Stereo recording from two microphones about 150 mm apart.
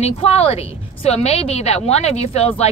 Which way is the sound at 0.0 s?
40° left (ahead or behind).